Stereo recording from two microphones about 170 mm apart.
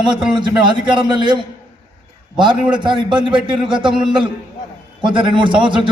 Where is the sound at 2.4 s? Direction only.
25° right (ahead or behind).